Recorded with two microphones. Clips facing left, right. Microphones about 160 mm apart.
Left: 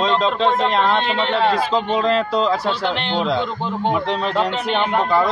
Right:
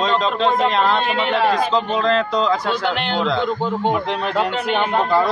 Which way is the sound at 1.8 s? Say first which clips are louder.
Even; 5° left (ahead or behind).